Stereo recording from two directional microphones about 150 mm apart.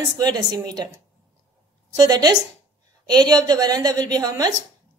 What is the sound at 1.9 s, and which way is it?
A woman's voice, 25° right (ahead or behind).